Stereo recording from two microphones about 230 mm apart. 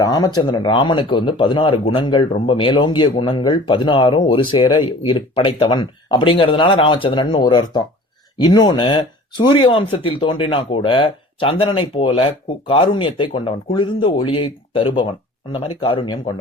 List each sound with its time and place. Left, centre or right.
0.0 s speech: centre